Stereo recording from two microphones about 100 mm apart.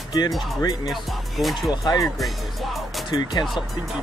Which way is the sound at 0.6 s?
35° left (ahead or behind).